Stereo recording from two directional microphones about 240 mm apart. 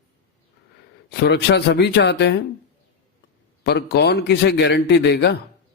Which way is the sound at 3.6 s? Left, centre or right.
Left.